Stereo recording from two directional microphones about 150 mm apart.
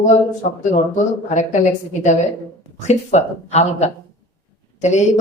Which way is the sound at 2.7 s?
50° left (ahead or behind).